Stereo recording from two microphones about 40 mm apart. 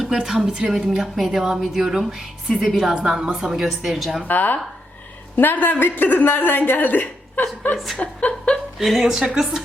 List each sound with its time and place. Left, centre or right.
0.0 s a woman's voice: centre
0.4 s a woman's voice: right
0.7 s a woman's voice: centre
1.4 s music: centre
2.6 s a woman's voice: centre
3.3 s music: centre
4.3 s a woman's voice: left
7.9 s speech: left
8.8 s a woman's voice: centre
9.2 s music: centre